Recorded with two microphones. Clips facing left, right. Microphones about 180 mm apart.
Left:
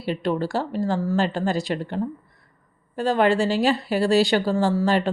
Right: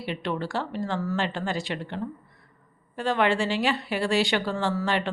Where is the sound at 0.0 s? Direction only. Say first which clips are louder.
Left 6 dB; 40° left (ahead or behind).